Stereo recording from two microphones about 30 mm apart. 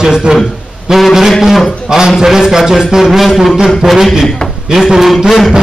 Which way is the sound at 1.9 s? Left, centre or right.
Centre.